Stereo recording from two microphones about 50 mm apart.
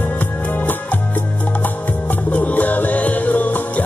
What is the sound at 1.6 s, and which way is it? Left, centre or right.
Music, left.